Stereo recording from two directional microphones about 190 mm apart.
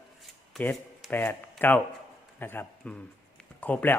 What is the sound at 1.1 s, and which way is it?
A man's voice, 10° left (ahead or behind).